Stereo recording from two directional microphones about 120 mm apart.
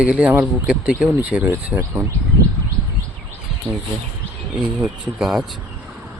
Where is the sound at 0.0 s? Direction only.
10° right (ahead or behind).